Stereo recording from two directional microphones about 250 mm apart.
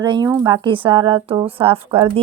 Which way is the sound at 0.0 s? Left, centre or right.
Centre.